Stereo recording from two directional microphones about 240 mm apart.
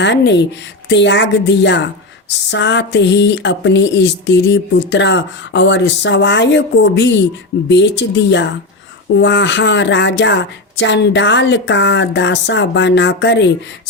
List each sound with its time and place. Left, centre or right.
0.0 s speech: left